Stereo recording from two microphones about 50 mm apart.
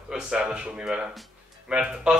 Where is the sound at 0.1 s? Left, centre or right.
Centre.